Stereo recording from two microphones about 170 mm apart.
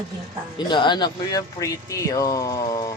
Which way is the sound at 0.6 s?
25° left (ahead or behind).